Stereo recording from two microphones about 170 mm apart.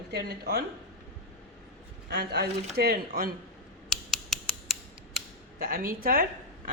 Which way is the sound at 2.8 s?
60° right (ahead or behind).